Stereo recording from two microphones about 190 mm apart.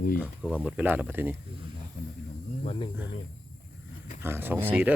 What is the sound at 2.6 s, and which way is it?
Speech, 30° left (ahead or behind).